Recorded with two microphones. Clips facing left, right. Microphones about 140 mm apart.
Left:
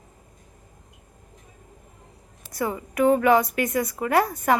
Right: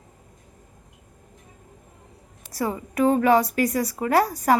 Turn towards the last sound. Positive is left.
turn(degrees=-35)  # may be behind; listen again after turning